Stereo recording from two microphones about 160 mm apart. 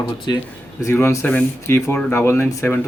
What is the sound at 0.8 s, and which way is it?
Speech, 15° left (ahead or behind).